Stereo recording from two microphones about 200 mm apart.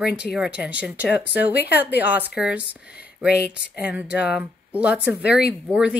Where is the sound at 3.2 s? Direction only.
50° left (ahead or behind).